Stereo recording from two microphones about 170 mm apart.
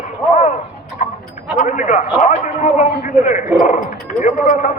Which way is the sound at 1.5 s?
50° left (ahead or behind).